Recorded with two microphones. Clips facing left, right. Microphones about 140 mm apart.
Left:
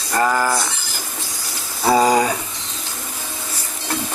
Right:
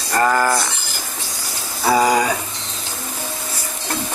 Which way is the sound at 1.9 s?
25° left (ahead or behind).